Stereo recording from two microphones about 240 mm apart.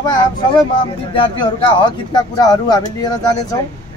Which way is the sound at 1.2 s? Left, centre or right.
Left.